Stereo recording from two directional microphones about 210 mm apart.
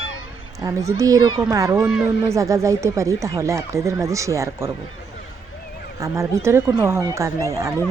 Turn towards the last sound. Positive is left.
turn(degrees=-15)  # may be behind; listen again after turning